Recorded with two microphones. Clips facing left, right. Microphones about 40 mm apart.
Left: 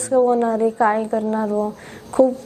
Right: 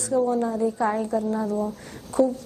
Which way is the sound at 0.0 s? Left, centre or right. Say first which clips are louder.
Left 6 dB; left.